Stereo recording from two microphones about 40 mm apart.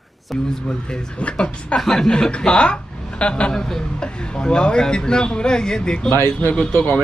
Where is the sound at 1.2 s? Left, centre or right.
Left.